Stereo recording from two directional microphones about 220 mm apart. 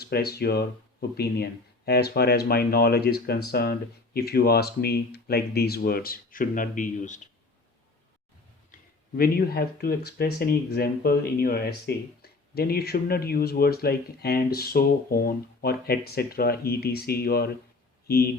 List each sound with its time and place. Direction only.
0.0 s speech: 45° left (ahead or behind)
9.1 s speech: 45° left (ahead or behind)